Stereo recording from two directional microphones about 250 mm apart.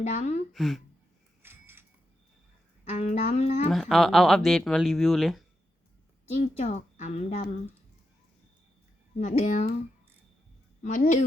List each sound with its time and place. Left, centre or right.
0.0 s a woman's voice: left
0.5 s speech: centre
1.4 s a sound: centre
2.9 s a woman's voice: left
3.7 s speech: centre
6.4 s a woman's voice: left
9.1 s a woman's voice: left
10.8 s a woman's voice: left